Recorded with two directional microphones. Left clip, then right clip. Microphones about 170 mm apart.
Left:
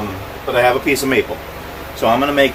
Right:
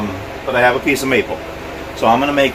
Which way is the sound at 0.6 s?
20° right (ahead or behind).